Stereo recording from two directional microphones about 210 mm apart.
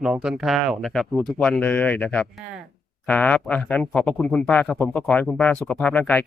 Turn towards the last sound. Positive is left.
turn(degrees=10)  # may be behind; listen again after turning